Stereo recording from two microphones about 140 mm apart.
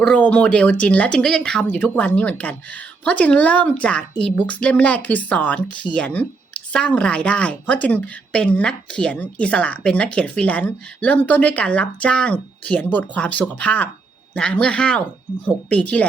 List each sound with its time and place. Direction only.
0.0 s speech: 10° left (ahead or behind)